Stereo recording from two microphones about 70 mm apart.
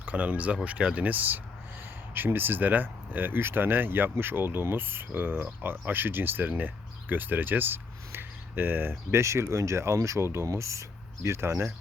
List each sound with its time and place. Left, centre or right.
0.0 s speech: right